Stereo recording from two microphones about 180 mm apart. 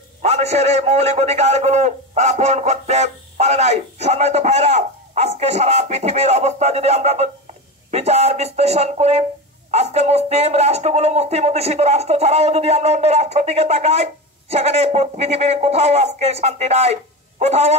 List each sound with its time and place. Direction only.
0.2 s a man's voice: 35° right (ahead or behind)